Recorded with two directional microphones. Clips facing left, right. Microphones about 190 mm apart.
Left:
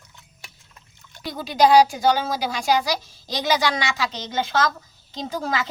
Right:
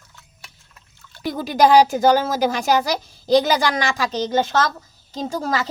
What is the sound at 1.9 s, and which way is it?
Speech, 50° right (ahead or behind).